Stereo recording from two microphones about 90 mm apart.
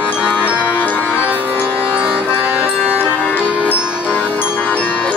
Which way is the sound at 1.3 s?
20° right (ahead or behind).